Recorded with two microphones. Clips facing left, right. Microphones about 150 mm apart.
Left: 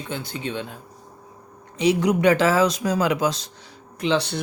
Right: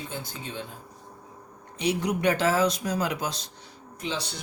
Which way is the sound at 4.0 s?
65° left (ahead or behind).